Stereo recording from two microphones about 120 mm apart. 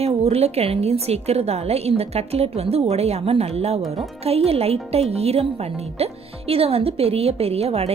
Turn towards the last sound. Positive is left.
turn(degrees=-55)  # may be behind; listen again after turning